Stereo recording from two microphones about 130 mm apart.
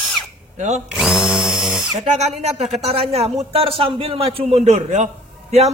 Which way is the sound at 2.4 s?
55° right (ahead or behind).